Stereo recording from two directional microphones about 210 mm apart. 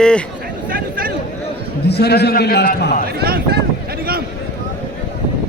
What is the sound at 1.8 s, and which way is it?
A man's voice, 50° left (ahead or behind).